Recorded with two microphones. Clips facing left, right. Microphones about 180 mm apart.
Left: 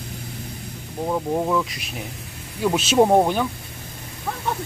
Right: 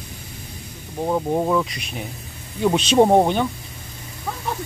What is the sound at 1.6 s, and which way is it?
Speech, centre (ahead or behind).